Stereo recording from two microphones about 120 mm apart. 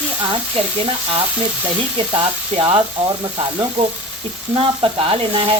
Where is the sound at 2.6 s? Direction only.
40° right (ahead or behind).